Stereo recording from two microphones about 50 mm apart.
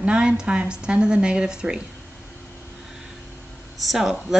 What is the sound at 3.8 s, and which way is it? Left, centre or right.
Speech, centre.